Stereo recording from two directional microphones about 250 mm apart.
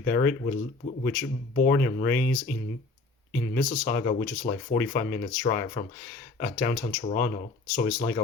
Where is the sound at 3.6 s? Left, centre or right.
Left.